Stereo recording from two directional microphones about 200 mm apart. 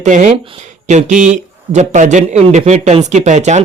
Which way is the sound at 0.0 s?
40° right (ahead or behind).